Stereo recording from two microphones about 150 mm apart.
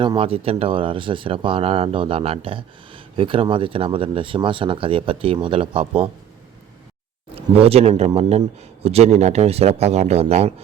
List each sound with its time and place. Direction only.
0.0 s speech: 35° right (ahead or behind)
7.3 s speech: 40° right (ahead or behind)